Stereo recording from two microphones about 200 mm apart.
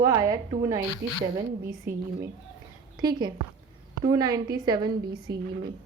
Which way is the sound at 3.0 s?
20° right (ahead or behind).